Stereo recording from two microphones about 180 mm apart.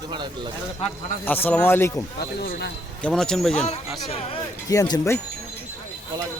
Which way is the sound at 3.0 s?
5° left (ahead or behind).